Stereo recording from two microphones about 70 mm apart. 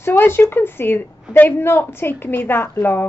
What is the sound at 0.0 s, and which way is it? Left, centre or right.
A woman's voice, left.